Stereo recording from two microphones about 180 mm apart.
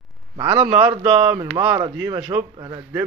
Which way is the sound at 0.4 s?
25° right (ahead or behind).